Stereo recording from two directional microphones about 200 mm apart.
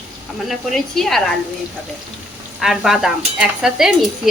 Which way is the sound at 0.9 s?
Centre (ahead or behind).